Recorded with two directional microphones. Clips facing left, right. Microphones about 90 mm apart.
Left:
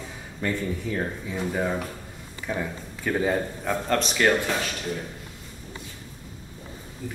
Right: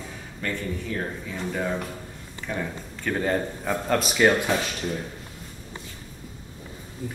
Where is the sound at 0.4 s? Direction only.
15° left (ahead or behind); by 4.3 s 5° right (ahead or behind).